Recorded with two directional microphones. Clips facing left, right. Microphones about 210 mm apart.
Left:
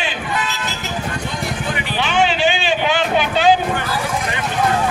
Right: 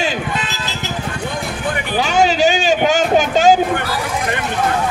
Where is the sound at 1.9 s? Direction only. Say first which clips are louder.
Right 4 dB; 40° right (ahead or behind).